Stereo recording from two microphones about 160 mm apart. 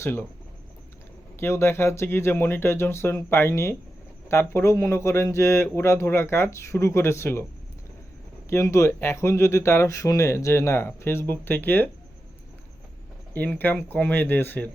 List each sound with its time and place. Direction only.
0.0 s speech: 15° left (ahead or behind)
1.4 s speech: 15° left (ahead or behind)
8.4 s speech: 15° left (ahead or behind)
13.3 s speech: 10° left (ahead or behind)